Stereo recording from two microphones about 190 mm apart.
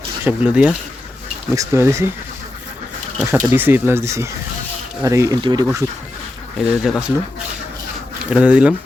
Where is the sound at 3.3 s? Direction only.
10° right (ahead or behind).